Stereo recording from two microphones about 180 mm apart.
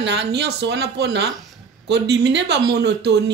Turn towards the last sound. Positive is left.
turn(degrees=-70)  # may be behind; listen again after turning